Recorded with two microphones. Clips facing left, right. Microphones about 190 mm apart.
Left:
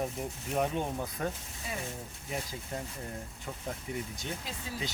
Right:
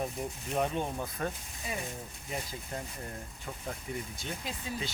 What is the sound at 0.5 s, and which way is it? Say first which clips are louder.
Speech: left 1 dB; 15° left (ahead or behind).